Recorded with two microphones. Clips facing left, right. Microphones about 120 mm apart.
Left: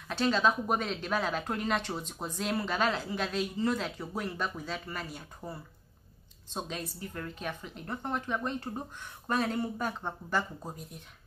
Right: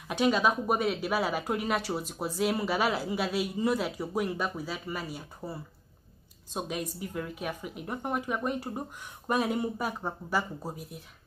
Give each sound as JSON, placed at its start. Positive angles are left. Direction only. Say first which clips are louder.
{"t": 0.1, "sound": "a woman's voice", "louder": "right 2 dB", "side_deg": -10}